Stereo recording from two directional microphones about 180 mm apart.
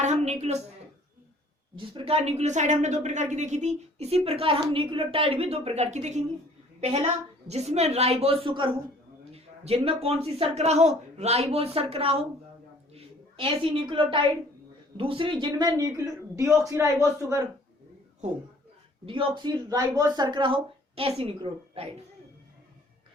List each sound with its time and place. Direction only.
0.0 s a woman's voice: 40° right (ahead or behind)
1.7 s a woman's voice: 25° right (ahead or behind)
19.0 s speech: 30° right (ahead or behind)